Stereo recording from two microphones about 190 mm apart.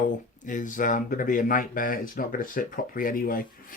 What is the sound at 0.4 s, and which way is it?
Speech, 45° left (ahead or behind).